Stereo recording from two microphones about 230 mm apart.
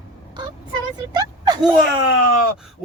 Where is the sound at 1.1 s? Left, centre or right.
Centre.